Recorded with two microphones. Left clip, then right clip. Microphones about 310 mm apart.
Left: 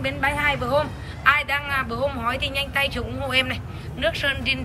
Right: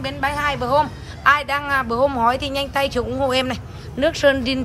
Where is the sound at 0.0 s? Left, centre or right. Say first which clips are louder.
Right 1 dB; centre.